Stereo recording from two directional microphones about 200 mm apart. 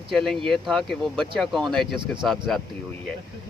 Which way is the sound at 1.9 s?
25° right (ahead or behind).